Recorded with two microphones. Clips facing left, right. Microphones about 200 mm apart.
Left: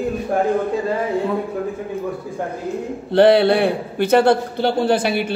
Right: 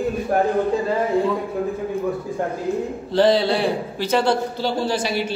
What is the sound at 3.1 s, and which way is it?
A man's voice, 60° left (ahead or behind).